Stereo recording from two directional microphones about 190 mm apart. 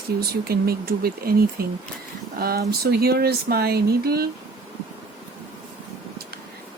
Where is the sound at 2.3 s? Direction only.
50° right (ahead or behind).